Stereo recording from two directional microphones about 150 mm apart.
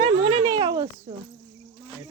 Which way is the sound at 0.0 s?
35° right (ahead or behind).